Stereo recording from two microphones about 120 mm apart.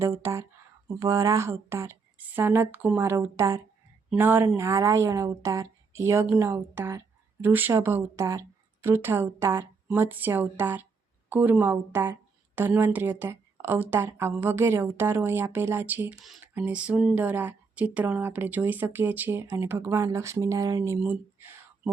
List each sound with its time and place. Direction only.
0.0 s a woman's voice: 25° right (ahead or behind)